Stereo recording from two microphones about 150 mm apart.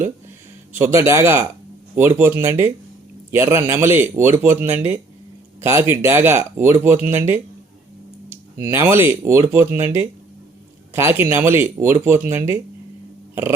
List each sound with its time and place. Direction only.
0.8 s speech: 15° right (ahead or behind)
8.7 s speech: 15° right (ahead or behind)